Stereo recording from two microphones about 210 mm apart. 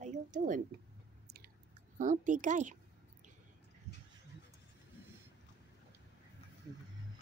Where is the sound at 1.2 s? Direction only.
50° right (ahead or behind).